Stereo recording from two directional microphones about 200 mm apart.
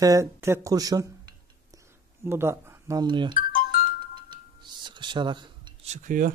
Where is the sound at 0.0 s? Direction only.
15° right (ahead or behind).